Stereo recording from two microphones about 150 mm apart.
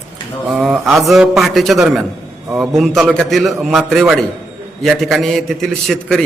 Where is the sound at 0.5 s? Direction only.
Centre (ahead or behind).